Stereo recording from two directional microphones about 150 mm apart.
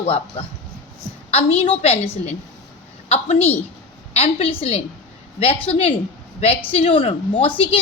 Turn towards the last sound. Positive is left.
turn(degrees=40)  # may be behind; listen again after turning